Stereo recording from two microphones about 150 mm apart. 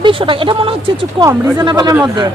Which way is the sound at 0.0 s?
35° right (ahead or behind).